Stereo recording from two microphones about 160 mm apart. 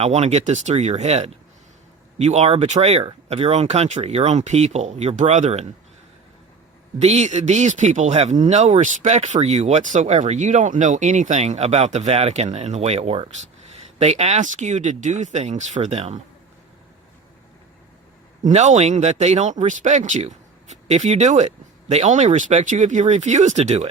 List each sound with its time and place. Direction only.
0.0 s speech: 40° right (ahead or behind)
7.0 s speech: 45° right (ahead or behind)
18.4 s speech: 45° right (ahead or behind)